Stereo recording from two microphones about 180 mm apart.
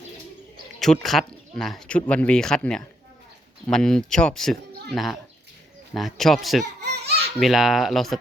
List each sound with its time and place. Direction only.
0.8 s speech: centre (ahead or behind)
6.8 s baby laughter: 65° right (ahead or behind)
7.3 s speech: centre (ahead or behind)